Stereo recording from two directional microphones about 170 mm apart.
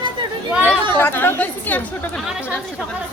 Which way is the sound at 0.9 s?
10° left (ahead or behind).